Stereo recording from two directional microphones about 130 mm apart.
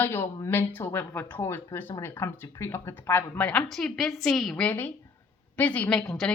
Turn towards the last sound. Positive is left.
turn(degrees=5)  # may be behind; listen again after turning